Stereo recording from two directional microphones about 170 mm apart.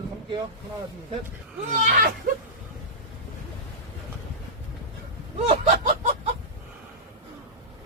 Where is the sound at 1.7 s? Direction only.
55° right (ahead or behind).